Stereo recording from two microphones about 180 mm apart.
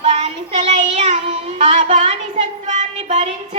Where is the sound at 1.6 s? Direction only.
40° right (ahead or behind).